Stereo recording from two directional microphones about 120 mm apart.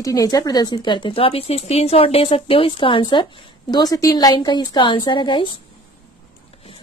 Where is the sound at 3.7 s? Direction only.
30° left (ahead or behind).